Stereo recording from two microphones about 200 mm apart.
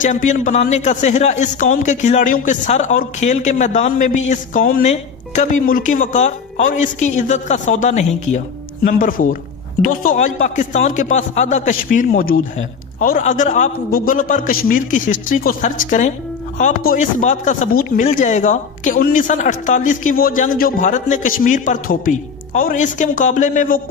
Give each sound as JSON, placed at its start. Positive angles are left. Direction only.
{"t": 0.0, "sound": "a man's voice", "side_deg": 40}